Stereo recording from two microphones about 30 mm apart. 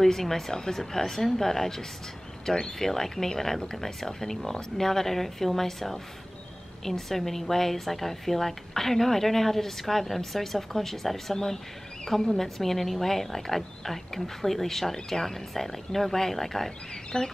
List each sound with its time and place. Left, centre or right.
0.0 s a woman's voice: centre
2.4 s speech: left
2.8 s a woman's voice: centre
16.9 s speech: left